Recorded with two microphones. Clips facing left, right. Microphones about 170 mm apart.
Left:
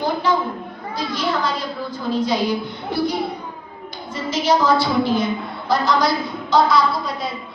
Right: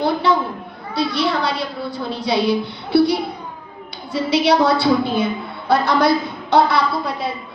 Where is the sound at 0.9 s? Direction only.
70° right (ahead or behind).